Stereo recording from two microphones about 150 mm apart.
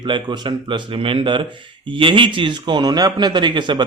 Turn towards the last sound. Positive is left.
turn(degrees=-30)  # may be behind; listen again after turning